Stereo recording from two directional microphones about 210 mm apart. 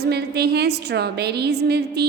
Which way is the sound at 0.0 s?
50° right (ahead or behind).